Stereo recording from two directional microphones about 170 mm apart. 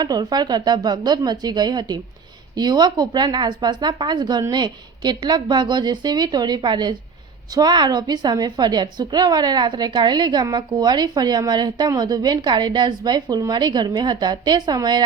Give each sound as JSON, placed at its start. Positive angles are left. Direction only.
{"t": 0.0, "sound": "a woman's voice", "side_deg": -25}